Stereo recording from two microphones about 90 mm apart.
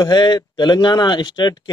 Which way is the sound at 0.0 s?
50° left (ahead or behind).